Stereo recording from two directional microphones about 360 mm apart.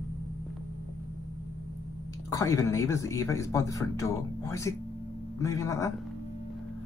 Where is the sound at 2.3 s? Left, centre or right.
Centre.